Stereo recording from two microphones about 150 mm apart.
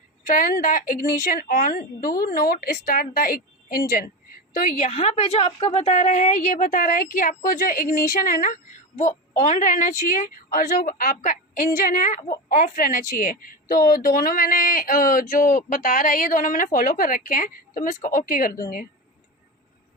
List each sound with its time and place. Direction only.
0.3 s speech: 70° left (ahead or behind)
4.5 s a woman's voice: 60° left (ahead or behind)
4.9 s a woman's voice: 45° left (ahead or behind); by 8.5 s 65° left (ahead or behind)
9.0 s a woman's voice: 55° left (ahead or behind); by 18.6 s 70° left (ahead or behind)